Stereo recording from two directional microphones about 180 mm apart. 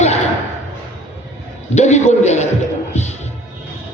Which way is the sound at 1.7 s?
40° left (ahead or behind).